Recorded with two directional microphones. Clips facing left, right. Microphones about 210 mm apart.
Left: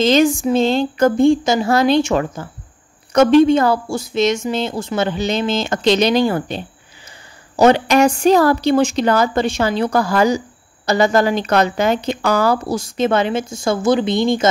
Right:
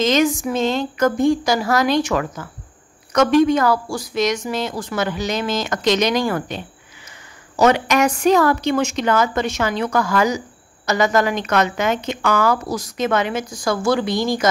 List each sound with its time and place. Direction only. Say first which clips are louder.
0.0 s a woman's voice: left 4 dB; 30° left (ahead or behind)